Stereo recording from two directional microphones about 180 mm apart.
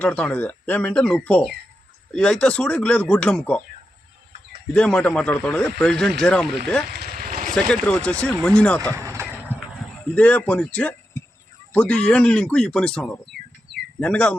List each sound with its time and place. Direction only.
0.0 s speech: 10° left (ahead or behind)
4.7 s speech: 5° left (ahead or behind)
6.8 s vehicle: 60° right (ahead or behind)
7.5 s speech: 5° left (ahead or behind)
9.0 s a sound: 15° right (ahead or behind)
10.2 s speech: 10° left (ahead or behind)